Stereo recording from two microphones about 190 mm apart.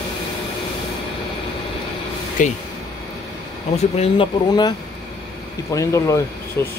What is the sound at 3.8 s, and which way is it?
Speech, 35° left (ahead or behind).